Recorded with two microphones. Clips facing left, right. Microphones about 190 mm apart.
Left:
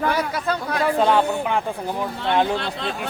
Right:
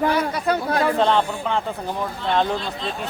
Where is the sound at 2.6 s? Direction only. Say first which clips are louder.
Left 1 dB; 65° left (ahead or behind).